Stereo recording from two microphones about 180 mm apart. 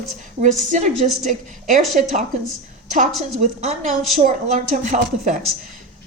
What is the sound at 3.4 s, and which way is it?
A woman's voice, 40° right (ahead or behind).